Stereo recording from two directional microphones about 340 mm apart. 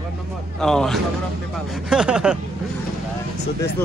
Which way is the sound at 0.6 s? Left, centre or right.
Centre.